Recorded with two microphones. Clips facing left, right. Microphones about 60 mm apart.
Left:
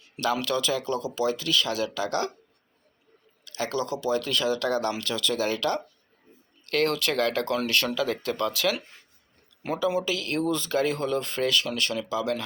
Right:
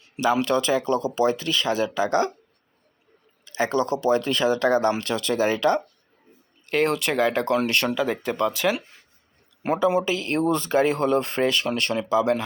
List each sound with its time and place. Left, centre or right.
0.2 s speech: right
3.4 s speech: right
9.6 s speech: right